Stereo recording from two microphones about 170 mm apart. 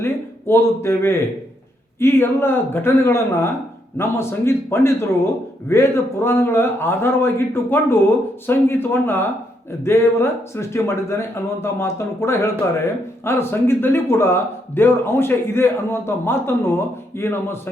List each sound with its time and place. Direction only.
0.0 s speech: 15° left (ahead or behind)